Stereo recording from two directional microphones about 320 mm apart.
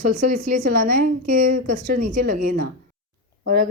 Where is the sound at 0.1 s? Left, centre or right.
Right.